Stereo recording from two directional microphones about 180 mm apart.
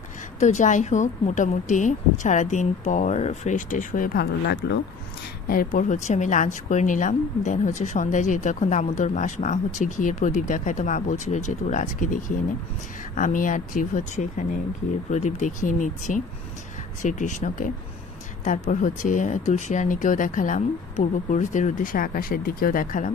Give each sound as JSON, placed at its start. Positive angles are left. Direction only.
{"t": 0.4, "sound": "a woman's voice", "side_deg": 40}
{"t": 5.5, "sound": "a woman's voice", "side_deg": 50}